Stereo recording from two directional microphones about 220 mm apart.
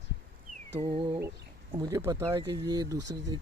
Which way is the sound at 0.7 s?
25° right (ahead or behind).